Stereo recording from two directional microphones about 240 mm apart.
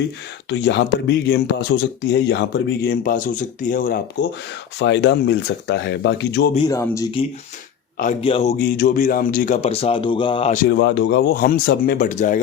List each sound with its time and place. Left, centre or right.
0.5 s speech: left
3.6 s speech: left
4.8 s speech: left
6.5 s speech: centre
10.7 s speech: left